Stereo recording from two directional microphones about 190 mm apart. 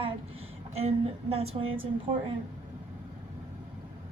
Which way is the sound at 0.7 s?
30° right (ahead or behind).